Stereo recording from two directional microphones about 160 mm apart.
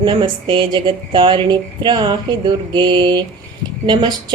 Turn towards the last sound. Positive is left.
turn(degrees=-30)  # may be behind; listen again after turning